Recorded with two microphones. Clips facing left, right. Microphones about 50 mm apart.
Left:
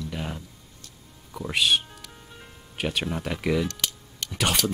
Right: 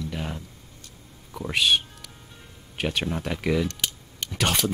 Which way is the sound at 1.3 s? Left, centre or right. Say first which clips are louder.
Right 1 dB; centre.